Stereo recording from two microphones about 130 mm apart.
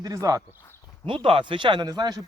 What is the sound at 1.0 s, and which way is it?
Speech, 45° right (ahead or behind).